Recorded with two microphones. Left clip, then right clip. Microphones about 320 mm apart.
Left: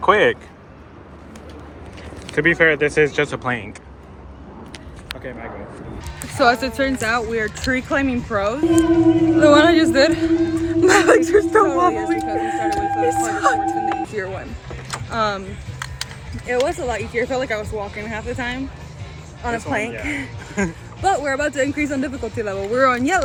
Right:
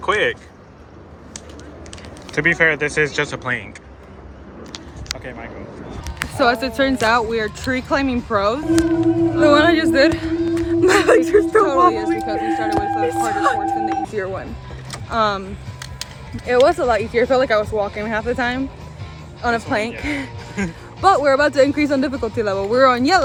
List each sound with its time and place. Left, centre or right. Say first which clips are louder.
0.0 s a man's voice: left 4 dB; centre
2.3 s a man's voice: even; centre
6.1 s a man's voice: left 1 dB; centre
16.5 s speech: right 6 dB; centre
19.5 s a man's voice: right 2 dB; centre
21.0 s speech: right 5 dB; centre